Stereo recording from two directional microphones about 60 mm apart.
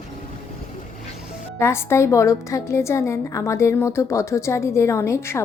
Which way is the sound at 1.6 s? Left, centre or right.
Left.